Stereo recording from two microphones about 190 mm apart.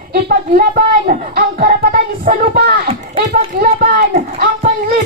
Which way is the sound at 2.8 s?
30° right (ahead or behind).